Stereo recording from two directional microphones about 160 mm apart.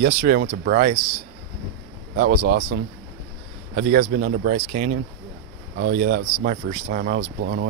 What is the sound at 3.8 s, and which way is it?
Speech, 75° right (ahead or behind).